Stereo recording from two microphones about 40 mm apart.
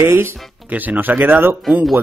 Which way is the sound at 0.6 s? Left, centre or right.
Right.